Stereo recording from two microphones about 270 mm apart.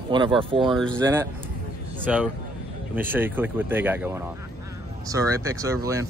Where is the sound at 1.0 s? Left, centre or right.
Centre.